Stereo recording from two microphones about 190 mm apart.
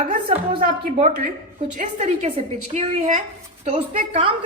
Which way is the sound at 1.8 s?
35° right (ahead or behind).